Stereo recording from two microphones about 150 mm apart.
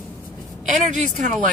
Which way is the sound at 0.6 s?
55° right (ahead or behind).